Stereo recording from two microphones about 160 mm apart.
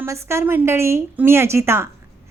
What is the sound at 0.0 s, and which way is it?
Speech, 15° right (ahead or behind).